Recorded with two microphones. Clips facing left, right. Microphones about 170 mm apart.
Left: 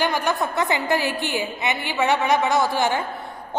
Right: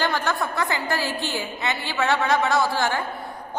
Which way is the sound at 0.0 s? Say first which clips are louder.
Left 2 dB; 15° left (ahead or behind).